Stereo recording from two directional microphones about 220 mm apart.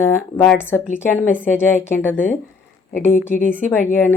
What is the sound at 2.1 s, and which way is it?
Speech, 35° left (ahead or behind).